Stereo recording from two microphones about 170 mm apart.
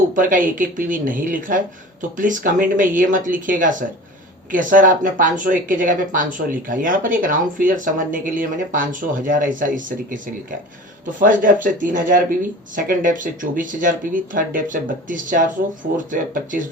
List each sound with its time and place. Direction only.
0.1 s speech: 50° right (ahead or behind)